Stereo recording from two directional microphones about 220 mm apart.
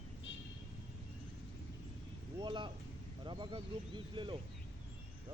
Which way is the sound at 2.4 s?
20° right (ahead or behind).